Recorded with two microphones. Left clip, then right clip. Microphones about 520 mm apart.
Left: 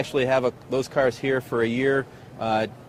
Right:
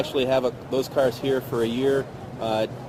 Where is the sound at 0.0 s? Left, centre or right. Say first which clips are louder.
Even; left.